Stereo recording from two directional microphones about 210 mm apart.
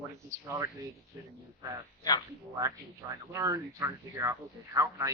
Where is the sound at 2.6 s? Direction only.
15° right (ahead or behind).